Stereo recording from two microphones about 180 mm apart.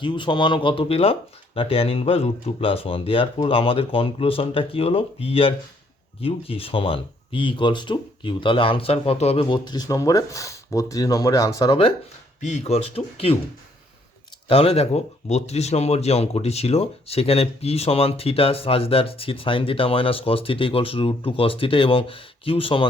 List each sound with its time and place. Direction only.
0.0 s speech: 25° left (ahead or behind)
12.4 s speech: 40° left (ahead or behind)
14.4 s speech: 30° left (ahead or behind)